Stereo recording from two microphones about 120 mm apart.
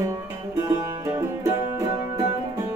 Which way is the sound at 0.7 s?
25° right (ahead or behind).